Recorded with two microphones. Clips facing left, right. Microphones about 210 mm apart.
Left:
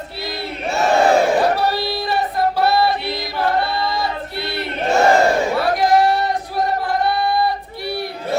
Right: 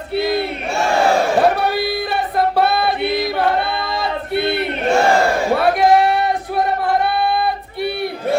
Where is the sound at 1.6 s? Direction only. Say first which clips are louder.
Right 1 dB; 60° right (ahead or behind).